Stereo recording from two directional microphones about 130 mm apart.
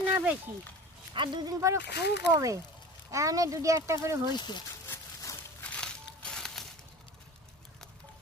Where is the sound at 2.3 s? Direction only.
25° right (ahead or behind).